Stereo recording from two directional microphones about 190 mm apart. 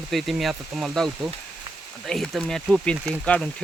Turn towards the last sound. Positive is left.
turn(degrees=5)  # may be behind; listen again after turning